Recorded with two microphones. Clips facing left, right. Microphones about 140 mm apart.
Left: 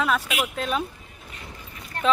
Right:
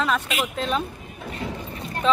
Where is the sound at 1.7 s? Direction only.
25° right (ahead or behind).